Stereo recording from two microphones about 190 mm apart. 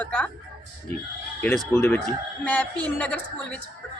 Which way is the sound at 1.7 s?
15° left (ahead or behind).